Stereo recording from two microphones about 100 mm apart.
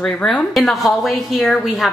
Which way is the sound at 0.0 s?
10° left (ahead or behind).